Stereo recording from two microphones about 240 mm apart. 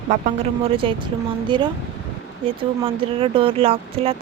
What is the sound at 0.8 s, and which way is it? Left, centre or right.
Speech, right.